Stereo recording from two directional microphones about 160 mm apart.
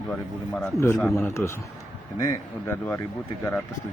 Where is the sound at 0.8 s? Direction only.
15° left (ahead or behind).